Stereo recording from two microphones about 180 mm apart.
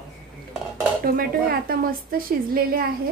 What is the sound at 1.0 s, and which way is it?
A woman's voice, 55° right (ahead or behind).